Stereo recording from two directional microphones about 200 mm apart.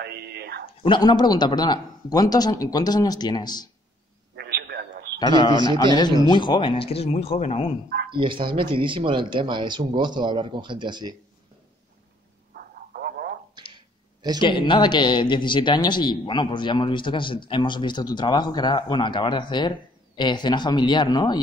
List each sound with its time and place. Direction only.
0.0 s whispering: 55° right (ahead or behind)
0.8 s speech: 20° left (ahead or behind)
4.4 s a sound: 50° right (ahead or behind)
5.2 s speech: 20° left (ahead or behind)
8.1 s speech: 25° right (ahead or behind)
12.5 s vehicle: 50° right (ahead or behind)
14.4 s speech: 25° left (ahead or behind)